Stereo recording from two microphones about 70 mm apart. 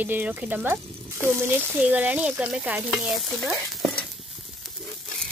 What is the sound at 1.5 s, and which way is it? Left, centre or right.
Speech, right.